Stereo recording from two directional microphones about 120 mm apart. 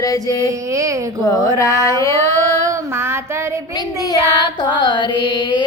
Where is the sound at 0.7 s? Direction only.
25° right (ahead or behind).